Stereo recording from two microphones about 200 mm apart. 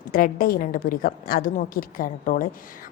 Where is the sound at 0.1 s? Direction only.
45° left (ahead or behind).